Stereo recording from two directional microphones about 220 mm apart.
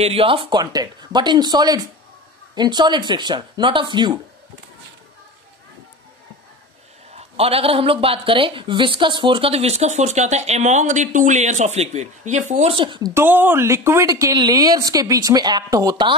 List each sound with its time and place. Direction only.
0.0 s speech: 25° right (ahead or behind)
7.1 s speech: 30° right (ahead or behind)